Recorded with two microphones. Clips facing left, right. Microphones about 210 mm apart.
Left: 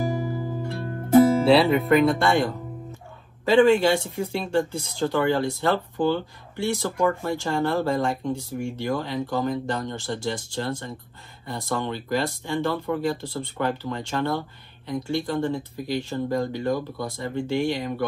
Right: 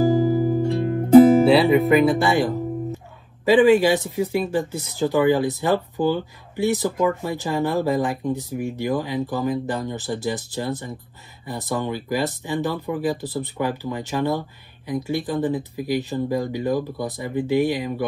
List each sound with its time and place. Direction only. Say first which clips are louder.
0.1 s music: right 10 dB; 30° right (ahead or behind)
0.7 s music: right 6 dB; 20° right (ahead or behind)
1.4 s speech: right 3 dB; centre (ahead or behind)